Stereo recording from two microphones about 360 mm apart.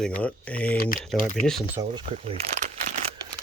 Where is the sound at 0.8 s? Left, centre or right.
Left.